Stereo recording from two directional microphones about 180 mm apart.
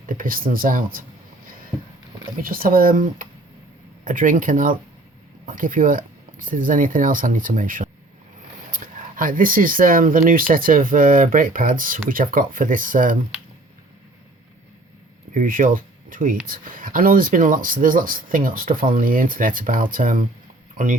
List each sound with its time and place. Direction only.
0.0 s speech: 50° right (ahead or behind)
2.4 s speech: 50° right (ahead or behind)
15.3 s speech: 50° right (ahead or behind)